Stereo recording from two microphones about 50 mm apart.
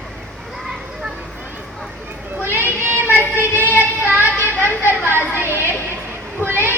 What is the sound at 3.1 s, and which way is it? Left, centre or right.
Child singing, right.